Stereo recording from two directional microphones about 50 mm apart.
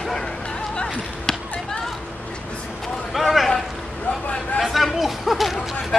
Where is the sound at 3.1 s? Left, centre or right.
Centre.